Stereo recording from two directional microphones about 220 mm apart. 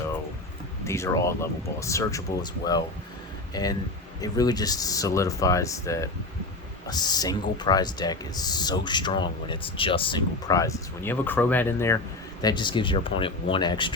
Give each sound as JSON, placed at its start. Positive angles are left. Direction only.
{"t": 0.9, "sound": "speech", "side_deg": 15}